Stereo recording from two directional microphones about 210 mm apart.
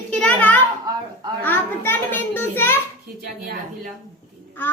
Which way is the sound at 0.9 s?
15° right (ahead or behind).